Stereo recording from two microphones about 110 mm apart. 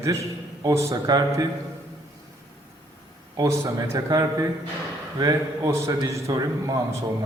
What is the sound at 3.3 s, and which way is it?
A man's voice, 30° right (ahead or behind).